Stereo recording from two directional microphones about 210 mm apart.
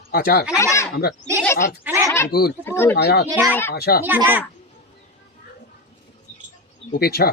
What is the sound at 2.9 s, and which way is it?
Speech, 50° left (ahead or behind).